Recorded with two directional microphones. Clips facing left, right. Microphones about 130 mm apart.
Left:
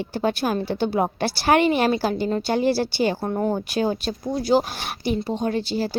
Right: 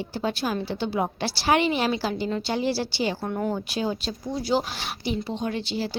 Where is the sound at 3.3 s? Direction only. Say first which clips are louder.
Left 4 dB; 35° left (ahead or behind).